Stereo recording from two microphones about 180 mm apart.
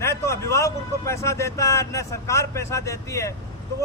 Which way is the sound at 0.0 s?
15° left (ahead or behind).